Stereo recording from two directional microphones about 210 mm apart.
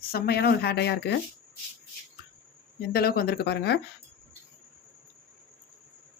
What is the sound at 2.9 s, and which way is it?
Speech, 45° left (ahead or behind).